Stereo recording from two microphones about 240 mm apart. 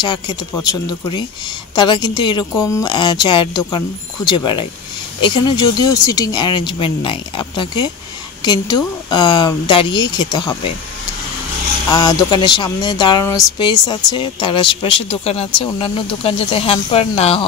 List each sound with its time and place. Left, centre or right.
0.0 s a woman's voice: centre
11.9 s speech: centre